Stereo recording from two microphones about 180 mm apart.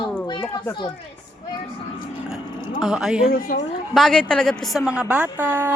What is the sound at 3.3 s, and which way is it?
Speech, 50° left (ahead or behind).